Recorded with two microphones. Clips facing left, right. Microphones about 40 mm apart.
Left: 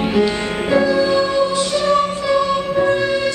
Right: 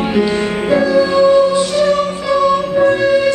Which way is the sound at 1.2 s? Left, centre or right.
Right.